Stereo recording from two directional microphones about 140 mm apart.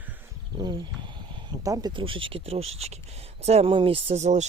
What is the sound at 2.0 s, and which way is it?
Speech, 40° right (ahead or behind).